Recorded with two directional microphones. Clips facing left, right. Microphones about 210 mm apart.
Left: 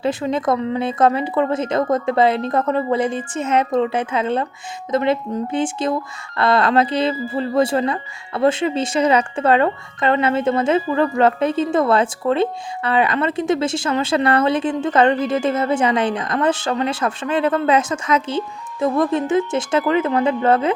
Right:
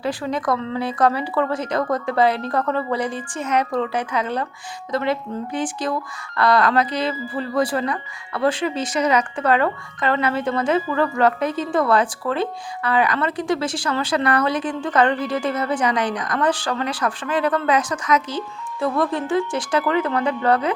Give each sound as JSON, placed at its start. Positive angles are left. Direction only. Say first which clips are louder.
{"t": 0.0, "sound": "a woman's voice", "louder": "left 4 dB", "side_deg": 25}